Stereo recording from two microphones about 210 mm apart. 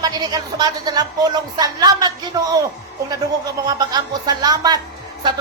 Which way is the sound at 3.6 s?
20° right (ahead or behind).